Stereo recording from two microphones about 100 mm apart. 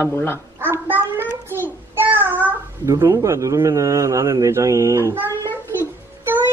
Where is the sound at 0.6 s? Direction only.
20° right (ahead or behind).